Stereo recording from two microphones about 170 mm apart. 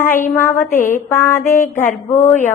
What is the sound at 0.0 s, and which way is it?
Mantra, 10° left (ahead or behind).